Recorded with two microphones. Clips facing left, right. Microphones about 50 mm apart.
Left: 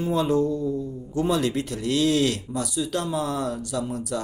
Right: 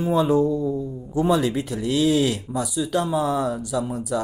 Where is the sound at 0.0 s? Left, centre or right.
Centre.